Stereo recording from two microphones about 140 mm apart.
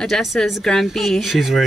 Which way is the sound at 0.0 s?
Centre (ahead or behind).